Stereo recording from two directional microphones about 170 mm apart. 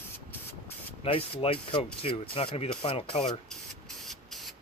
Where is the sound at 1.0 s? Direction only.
35° left (ahead or behind).